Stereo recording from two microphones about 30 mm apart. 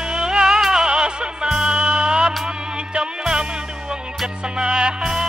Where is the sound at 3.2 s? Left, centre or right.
Right.